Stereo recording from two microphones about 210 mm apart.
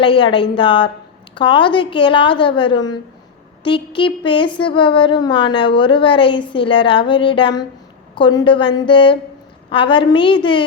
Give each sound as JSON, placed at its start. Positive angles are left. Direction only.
{"t": 0.0, "sound": "speech", "side_deg": 25}